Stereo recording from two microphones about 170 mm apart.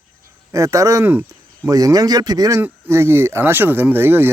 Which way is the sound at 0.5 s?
20° right (ahead or behind).